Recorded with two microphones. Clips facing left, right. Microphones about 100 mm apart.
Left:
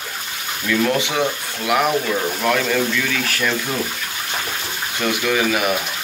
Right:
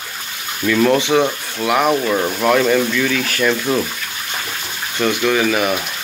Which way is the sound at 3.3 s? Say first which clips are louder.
Right 5 dB; centre (ahead or behind).